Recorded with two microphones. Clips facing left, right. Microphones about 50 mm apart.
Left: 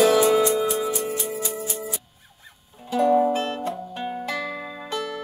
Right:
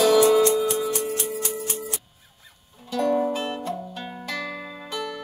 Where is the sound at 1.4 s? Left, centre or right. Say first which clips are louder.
Even; right.